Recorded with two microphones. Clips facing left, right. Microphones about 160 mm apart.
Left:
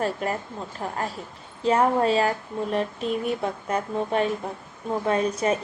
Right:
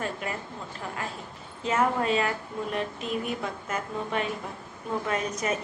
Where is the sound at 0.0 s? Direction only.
40° left (ahead or behind).